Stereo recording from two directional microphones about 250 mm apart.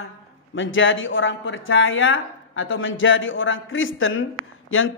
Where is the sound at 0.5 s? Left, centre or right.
Left.